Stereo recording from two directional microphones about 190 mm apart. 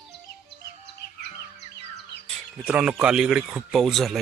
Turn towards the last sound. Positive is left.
turn(degrees=0)  # may be behind; listen again after turning